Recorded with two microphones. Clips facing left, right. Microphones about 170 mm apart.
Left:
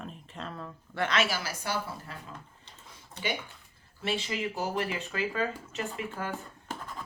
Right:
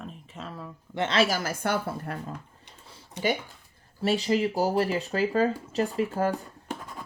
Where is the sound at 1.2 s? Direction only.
45° right (ahead or behind).